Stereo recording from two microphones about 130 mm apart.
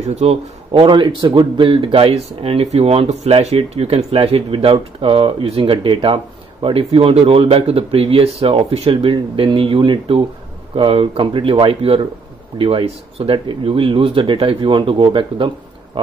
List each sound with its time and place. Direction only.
0.0 s a man's voice: 55° right (ahead or behind)
0.8 s speech: 35° right (ahead or behind)